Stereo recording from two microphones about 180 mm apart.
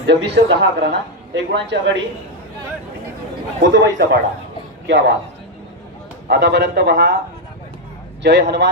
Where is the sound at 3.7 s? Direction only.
85° right.